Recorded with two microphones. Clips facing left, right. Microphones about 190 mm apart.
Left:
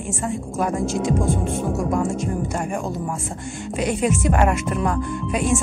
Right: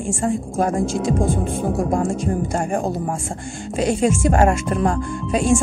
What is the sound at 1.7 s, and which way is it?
Speech, 30° right (ahead or behind).